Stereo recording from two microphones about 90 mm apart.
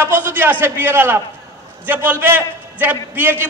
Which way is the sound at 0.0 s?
20° right (ahead or behind).